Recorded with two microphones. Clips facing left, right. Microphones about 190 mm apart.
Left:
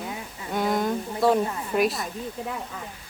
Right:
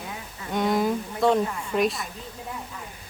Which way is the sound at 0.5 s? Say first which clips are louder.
Right 1 dB; centre (ahead or behind).